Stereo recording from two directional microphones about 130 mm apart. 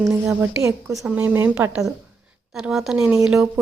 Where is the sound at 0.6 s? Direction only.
25° right (ahead or behind).